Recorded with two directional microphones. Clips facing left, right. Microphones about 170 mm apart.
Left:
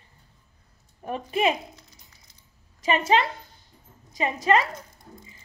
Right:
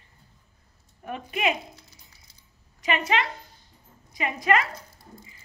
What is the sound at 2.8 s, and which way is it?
A woman's voice, 30° left (ahead or behind).